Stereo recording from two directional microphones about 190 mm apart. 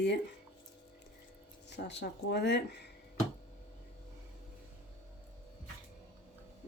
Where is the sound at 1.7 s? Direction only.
65° left (ahead or behind).